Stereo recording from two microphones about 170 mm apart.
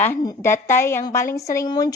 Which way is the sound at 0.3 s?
15° left (ahead or behind).